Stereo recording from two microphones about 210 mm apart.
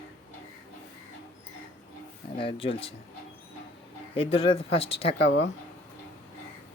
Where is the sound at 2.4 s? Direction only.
25° left (ahead or behind).